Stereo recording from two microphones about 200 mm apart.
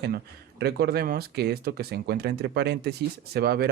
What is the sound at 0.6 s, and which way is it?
Speech, 50° right (ahead or behind).